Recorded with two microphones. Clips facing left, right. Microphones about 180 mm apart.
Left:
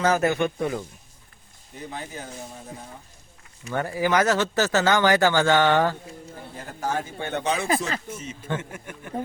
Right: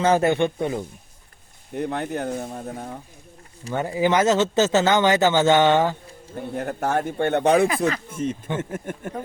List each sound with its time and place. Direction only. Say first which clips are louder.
0.0 s speech: right 3 dB; 25° right (ahead or behind)
1.7 s speech: right 10 dB; 60° right (ahead or behind)
3.7 s speech: right 2 dB; 20° right (ahead or behind)
6.3 s speech: right 16 dB; 60° right (ahead or behind); by 9.1 s 45° right (ahead or behind)